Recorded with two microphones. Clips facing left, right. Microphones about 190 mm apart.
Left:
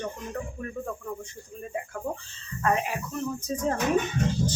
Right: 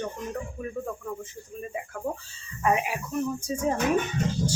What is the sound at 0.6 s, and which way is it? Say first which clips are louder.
Speech: right 1 dB; 5° right (ahead or behind).